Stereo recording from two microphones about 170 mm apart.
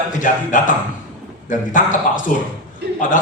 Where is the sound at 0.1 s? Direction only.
50° left (ahead or behind).